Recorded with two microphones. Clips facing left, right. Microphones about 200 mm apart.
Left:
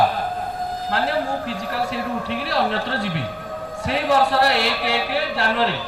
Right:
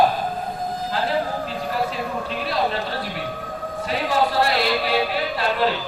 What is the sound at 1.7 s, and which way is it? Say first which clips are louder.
A man's voice: even; 75° left (ahead or behind).